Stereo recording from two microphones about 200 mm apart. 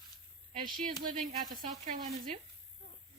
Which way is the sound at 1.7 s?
40° right (ahead or behind).